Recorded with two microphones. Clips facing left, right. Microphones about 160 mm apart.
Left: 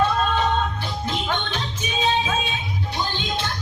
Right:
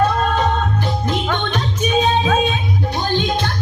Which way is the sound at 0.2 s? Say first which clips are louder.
Right 3 dB; 50° right (ahead or behind).